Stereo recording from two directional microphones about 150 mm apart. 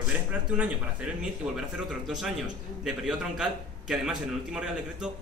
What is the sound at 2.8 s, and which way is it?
A man's voice, 5° right (ahead or behind).